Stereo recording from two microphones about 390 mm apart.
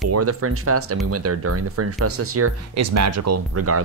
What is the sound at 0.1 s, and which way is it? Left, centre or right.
Speech, right.